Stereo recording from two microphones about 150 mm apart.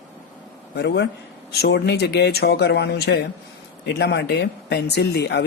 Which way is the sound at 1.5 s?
90° left.